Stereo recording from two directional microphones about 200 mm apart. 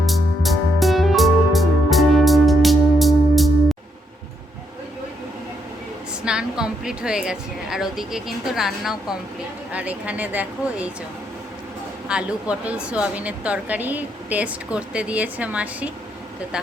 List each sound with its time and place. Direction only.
0.0 s music: centre (ahead or behind)
6.2 s a woman's voice: 5° right (ahead or behind)
12.0 s a woman's voice: 5° right (ahead or behind)